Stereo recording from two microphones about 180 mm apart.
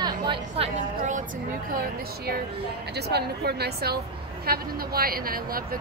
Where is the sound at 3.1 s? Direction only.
65° right (ahead or behind).